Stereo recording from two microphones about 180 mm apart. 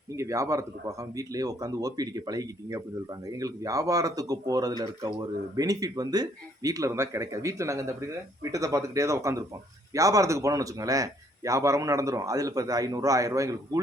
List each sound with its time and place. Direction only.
0.2 s a man's voice: 15° right (ahead or behind)